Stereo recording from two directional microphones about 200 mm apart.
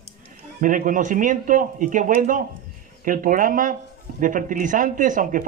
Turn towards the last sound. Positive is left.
turn(degrees=-40)  # may be behind; listen again after turning